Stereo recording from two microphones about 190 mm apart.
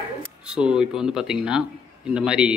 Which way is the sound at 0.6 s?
5° right (ahead or behind).